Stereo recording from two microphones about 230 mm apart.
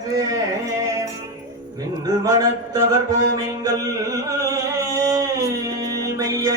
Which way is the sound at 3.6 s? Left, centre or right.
Centre.